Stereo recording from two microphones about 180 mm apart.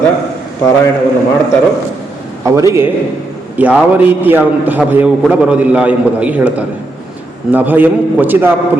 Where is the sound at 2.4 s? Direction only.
20° right (ahead or behind).